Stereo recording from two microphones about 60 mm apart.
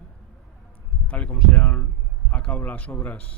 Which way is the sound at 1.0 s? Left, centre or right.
Left.